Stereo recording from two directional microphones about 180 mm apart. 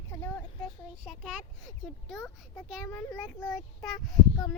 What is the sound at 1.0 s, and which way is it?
A child's voice, centre (ahead or behind).